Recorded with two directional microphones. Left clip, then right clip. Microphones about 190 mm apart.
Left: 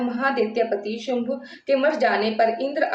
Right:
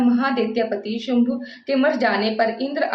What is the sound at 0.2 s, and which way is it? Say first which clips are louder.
A woman's voice: even; 10° right (ahead or behind).